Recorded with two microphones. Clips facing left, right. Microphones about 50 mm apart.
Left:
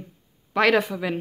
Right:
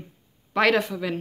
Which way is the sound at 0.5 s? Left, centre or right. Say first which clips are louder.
Left 1 dB; centre.